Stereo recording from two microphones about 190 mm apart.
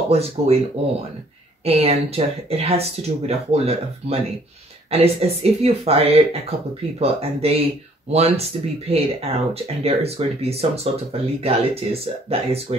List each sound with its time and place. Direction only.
0.1 s speech: 30° right (ahead or behind)
1.6 s speech: 30° right (ahead or behind)